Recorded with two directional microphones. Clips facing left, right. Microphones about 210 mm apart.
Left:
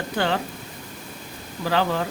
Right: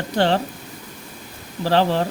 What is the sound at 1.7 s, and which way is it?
Speech, 35° right (ahead or behind).